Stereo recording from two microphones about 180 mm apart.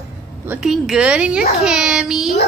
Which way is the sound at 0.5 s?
Centre (ahead or behind).